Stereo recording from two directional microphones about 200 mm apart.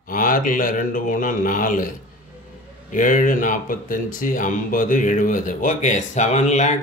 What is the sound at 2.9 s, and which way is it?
Speech, 40° left (ahead or behind).